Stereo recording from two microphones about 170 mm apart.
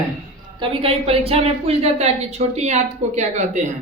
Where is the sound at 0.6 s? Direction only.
35° right (ahead or behind).